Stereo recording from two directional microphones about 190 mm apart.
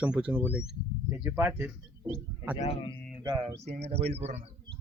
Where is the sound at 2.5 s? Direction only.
30° left (ahead or behind).